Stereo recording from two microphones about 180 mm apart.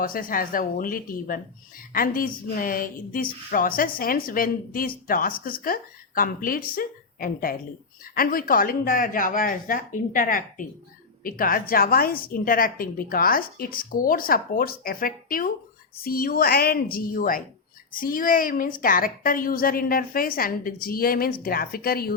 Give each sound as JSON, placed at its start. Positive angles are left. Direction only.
{"t": 0.0, "sound": "a woman's voice", "side_deg": 50}